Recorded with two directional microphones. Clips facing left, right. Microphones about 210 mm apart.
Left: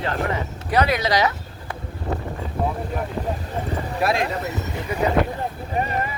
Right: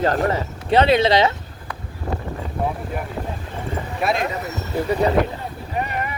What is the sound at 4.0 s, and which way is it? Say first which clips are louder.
Speech: even; centre (ahead or behind).